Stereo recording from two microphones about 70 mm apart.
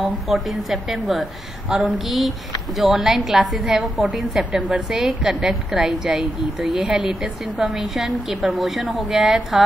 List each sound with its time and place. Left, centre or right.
0.0 s a woman's voice: centre
1.7 s a sound: centre
2.0 s a woman's voice: centre